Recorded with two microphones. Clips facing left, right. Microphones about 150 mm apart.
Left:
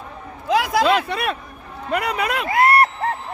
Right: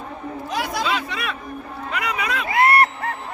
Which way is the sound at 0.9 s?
55° left (ahead or behind).